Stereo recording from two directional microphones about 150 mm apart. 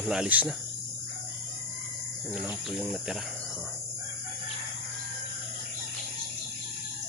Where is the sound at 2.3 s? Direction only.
5° right (ahead or behind).